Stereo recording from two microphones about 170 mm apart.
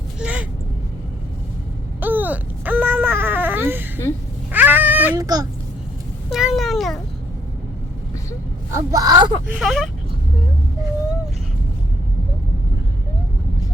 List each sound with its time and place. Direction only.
0.2 s a sound: 5° right (ahead or behind)
2.0 s wail: 10° right (ahead or behind)
4.5 s a sound: 10° right (ahead or behind)
5.2 s speech: 20° right (ahead or behind)
6.3 s cat: centre (ahead or behind)
8.7 s speech: 20° right (ahead or behind)
9.5 s speech: centre (ahead or behind)